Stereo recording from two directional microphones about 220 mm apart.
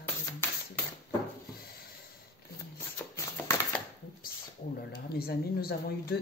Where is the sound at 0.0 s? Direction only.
10° left (ahead or behind).